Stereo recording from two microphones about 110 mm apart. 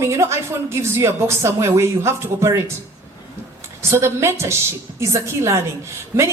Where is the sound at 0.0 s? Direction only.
25° right (ahead or behind).